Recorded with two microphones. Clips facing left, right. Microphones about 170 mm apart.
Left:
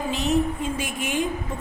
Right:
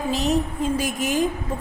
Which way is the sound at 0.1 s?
40° right (ahead or behind).